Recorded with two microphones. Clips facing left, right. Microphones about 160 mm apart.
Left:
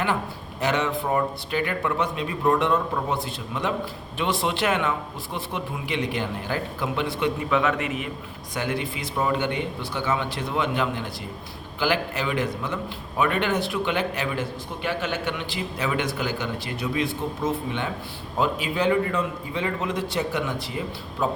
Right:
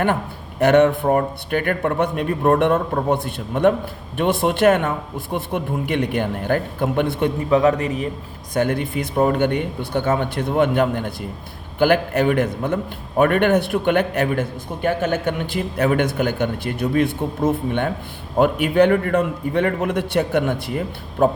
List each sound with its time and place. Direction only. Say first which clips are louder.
0.6 s a man's voice: right 11 dB; 60° right (ahead or behind)
7.5 s a man's voice: right 10 dB; 35° right (ahead or behind)
8.5 s a man's voice: right 8 dB; 50° right (ahead or behind)